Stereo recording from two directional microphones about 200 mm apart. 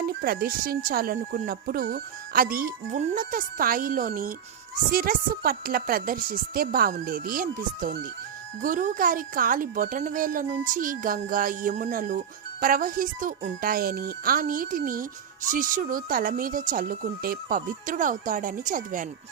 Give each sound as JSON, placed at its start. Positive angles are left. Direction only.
{"t": 0.0, "sound": "speech", "side_deg": -50}